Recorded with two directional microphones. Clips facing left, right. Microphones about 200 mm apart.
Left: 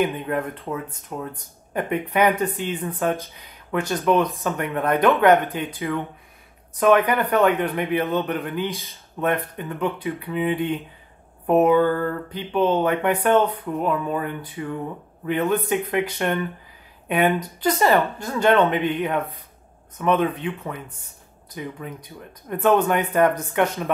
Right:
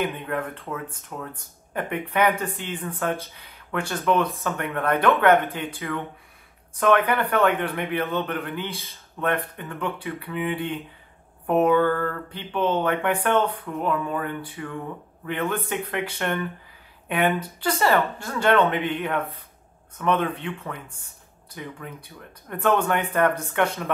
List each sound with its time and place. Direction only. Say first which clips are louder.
0.0 s a man's voice: left 4 dB; 15° left (ahead or behind)
6.8 s a man's voice: left 3 dB; 15° left (ahead or behind)